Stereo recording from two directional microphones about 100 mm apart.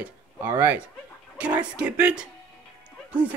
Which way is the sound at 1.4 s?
15° right (ahead or behind).